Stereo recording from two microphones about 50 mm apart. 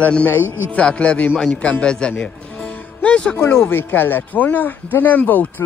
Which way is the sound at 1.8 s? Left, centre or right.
Centre.